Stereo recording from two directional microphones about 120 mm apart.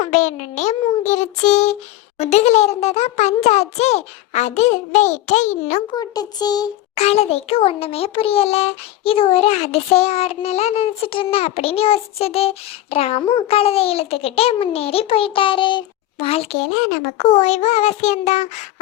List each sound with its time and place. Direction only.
0.0 s a child's voice: 75° left (ahead or behind)
6.0 s a child's voice: 35° left (ahead or behind)
6.9 s a child's voice: 60° left (ahead or behind)